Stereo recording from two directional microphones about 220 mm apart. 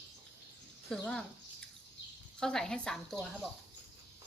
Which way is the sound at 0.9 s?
5° left (ahead or behind).